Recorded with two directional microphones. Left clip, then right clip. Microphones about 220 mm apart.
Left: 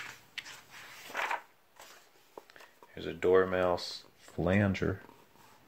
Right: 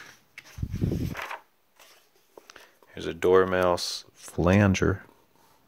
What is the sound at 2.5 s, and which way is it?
Speech, 40° right (ahead or behind).